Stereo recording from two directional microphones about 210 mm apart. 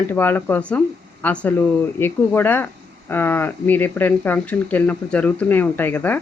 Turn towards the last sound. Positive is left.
turn(degrees=10)  # may be behind; listen again after turning